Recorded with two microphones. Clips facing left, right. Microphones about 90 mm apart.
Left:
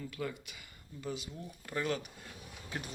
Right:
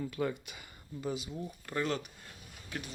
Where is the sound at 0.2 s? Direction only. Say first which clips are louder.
Right 5 dB; 35° right (ahead or behind).